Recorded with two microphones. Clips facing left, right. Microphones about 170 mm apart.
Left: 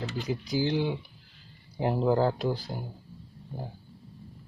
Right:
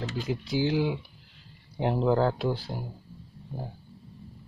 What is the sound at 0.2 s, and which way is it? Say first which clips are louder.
Speech: right 1 dB; centre (ahead or behind).